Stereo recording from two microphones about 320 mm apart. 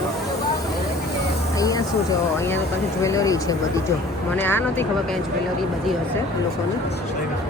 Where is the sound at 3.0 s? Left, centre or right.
Centre.